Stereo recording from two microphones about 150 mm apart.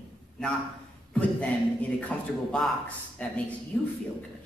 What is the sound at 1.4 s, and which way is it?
A man's voice, 10° left (ahead or behind).